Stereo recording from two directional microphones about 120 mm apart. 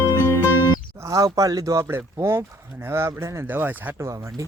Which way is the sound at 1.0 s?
30° right (ahead or behind).